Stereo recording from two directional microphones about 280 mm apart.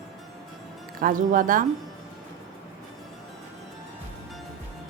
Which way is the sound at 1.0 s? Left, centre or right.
Right.